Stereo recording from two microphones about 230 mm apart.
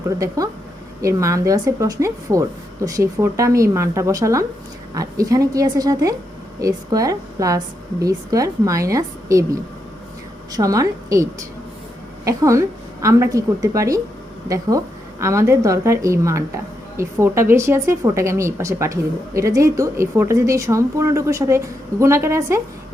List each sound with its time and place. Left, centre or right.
0.4 s speech: centre